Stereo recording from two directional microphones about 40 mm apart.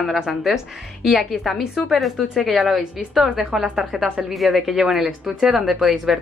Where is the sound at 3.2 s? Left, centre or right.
Right.